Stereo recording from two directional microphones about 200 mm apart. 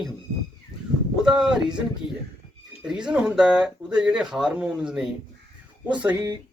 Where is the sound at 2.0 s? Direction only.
25° left (ahead or behind).